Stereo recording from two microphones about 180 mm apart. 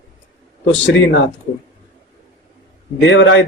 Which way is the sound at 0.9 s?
90° left.